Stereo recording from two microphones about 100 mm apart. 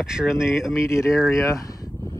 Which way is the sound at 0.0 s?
5° right (ahead or behind).